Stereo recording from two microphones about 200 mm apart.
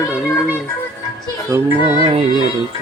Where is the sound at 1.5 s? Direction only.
15° right (ahead or behind).